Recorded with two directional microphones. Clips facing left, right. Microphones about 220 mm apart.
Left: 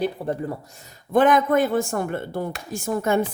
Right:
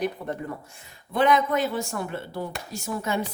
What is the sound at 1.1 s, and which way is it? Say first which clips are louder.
Speech: left 4 dB; 50° left (ahead or behind).